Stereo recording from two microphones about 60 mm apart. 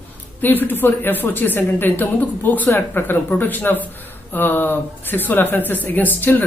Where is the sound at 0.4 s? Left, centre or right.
Left.